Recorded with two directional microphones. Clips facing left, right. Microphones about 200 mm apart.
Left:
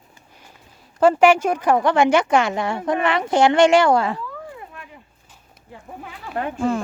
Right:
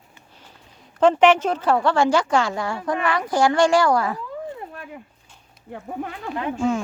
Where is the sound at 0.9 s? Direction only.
10° left (ahead or behind); by 4.2 s 25° left (ahead or behind).